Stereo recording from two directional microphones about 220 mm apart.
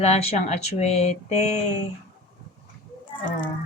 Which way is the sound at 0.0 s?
30° left (ahead or behind).